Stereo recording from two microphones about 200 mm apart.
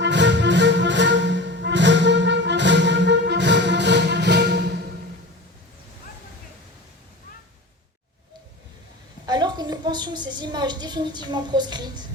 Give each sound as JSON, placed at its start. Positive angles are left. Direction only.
{"t": 0.0, "sound": "music", "side_deg": -60}
{"t": 9.2, "sound": "a woman's voice", "side_deg": -20}